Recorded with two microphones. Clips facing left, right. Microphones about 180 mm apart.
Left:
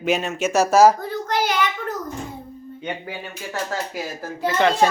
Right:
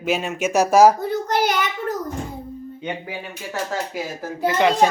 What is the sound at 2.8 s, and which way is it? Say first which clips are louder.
Speech: even; 10° right (ahead or behind).